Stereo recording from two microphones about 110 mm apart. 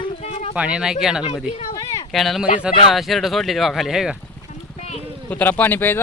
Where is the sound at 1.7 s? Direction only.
35° left (ahead or behind).